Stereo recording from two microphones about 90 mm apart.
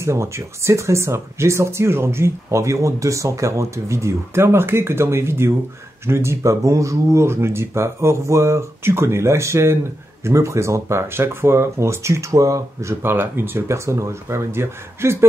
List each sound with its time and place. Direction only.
0.0 s speech: 30° right (ahead or behind)
13.0 s speech: 25° right (ahead or behind)